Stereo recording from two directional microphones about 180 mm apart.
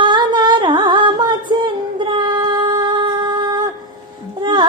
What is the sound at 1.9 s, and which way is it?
Female singing, 25° right (ahead or behind).